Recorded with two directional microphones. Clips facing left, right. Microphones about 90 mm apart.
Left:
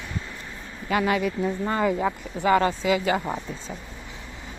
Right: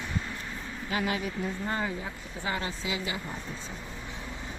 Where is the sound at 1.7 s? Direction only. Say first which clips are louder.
Left 9 dB; 90° left; by 3.3 s 60° left (ahead or behind).